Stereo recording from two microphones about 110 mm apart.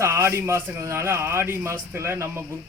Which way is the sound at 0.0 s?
25° right (ahead or behind).